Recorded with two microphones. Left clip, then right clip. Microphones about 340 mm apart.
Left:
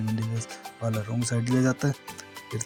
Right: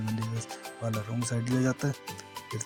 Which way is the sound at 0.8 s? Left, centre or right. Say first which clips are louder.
Left 4 dB; right.